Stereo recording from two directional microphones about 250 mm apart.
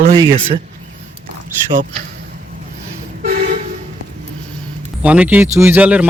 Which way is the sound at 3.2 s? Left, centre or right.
Right.